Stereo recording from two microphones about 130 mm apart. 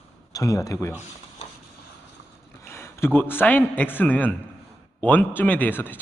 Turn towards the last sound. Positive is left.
turn(degrees=15)  # may be behind; listen again after turning